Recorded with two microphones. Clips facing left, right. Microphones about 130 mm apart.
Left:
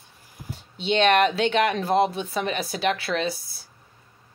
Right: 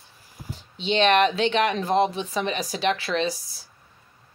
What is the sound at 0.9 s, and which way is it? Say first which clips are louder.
Speech: even; 45° left (ahead or behind).